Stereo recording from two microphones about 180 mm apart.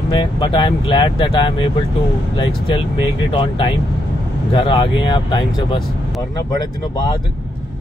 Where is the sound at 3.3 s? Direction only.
30° left (ahead or behind).